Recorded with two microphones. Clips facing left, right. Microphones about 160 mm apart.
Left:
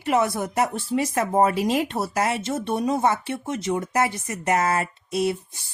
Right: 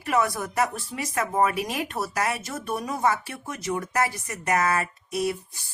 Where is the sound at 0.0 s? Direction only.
25° left (ahead or behind).